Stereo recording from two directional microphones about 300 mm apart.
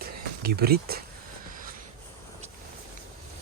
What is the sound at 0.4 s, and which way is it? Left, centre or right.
Speech, right.